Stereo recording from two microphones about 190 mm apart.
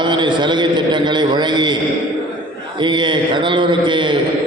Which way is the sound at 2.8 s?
25° right (ahead or behind).